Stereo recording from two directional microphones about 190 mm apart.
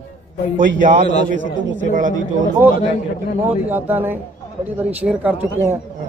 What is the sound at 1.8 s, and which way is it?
Speech, 45° right (ahead or behind).